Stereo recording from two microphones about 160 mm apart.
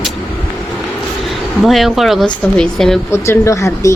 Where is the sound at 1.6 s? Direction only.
Centre (ahead or behind).